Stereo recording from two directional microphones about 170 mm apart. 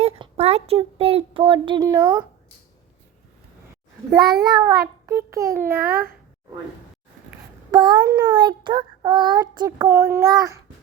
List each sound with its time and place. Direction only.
0.0 s speech: 35° right (ahead or behind); by 2.2 s 20° right (ahead or behind)
4.1 s child singing: 25° right (ahead or behind)
7.7 s child singing: 25° right (ahead or behind)